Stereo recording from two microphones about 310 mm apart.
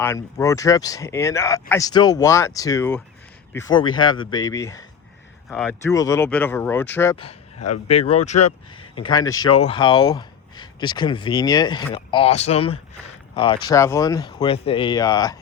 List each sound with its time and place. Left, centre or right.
0.0 s speech: centre